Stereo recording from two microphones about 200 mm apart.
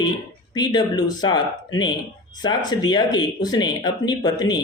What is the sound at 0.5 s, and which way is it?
Speech, 20° left (ahead or behind).